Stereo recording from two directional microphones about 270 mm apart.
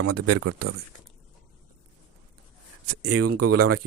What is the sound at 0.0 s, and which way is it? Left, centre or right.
Speech, right.